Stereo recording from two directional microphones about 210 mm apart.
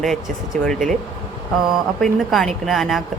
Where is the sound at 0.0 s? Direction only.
Centre (ahead or behind).